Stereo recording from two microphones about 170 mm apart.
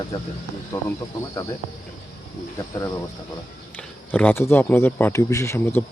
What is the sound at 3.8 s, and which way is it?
Speech, 5° left (ahead or behind).